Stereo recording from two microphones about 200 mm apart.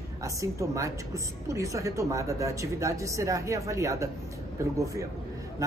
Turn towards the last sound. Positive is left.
turn(degrees=-15)  # may be behind; listen again after turning